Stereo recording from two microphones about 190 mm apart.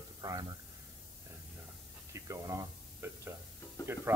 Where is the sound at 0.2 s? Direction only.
20° right (ahead or behind).